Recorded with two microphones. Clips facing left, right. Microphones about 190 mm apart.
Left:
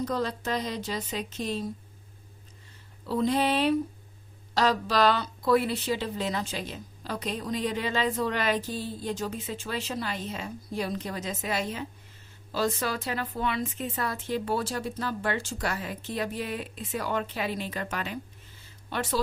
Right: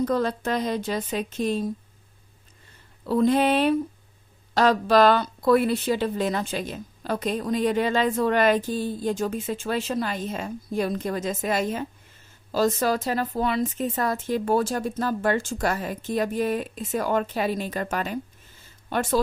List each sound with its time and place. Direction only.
0.0 s a woman's voice: 55° right (ahead or behind)
3.1 s a woman's voice: 55° right (ahead or behind)